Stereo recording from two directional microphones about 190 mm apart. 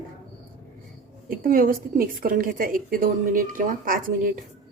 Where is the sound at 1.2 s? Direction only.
50° right (ahead or behind).